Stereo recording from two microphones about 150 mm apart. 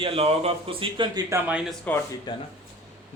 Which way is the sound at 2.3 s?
30° left (ahead or behind).